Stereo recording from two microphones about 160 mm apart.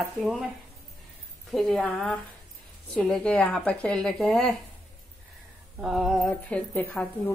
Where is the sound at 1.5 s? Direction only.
5° left (ahead or behind).